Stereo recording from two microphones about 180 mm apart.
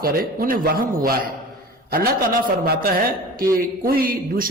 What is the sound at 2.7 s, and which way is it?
Speech, 55° right (ahead or behind).